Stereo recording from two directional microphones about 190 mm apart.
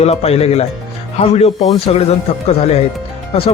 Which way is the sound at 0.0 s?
35° left (ahead or behind).